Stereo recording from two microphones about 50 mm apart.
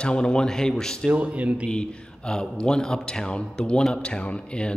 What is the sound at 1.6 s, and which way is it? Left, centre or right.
A man's voice, centre.